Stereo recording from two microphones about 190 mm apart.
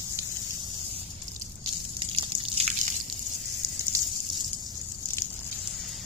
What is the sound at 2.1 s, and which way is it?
Drip, 35° right (ahead or behind).